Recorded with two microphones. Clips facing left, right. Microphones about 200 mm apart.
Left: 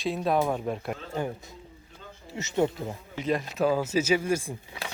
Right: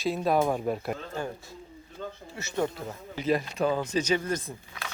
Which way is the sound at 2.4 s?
20° left (ahead or behind).